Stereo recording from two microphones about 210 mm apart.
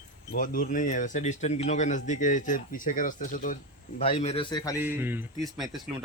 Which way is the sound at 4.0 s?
25° left (ahead or behind).